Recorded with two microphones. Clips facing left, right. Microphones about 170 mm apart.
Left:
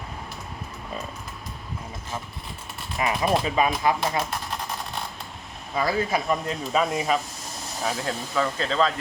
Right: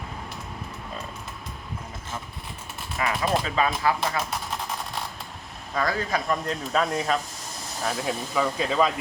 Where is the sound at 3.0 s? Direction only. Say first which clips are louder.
Left 2 dB; 20° left (ahead or behind).